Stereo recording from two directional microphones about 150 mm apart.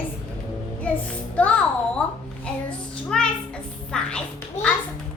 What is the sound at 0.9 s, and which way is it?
Music, 10° left (ahead or behind).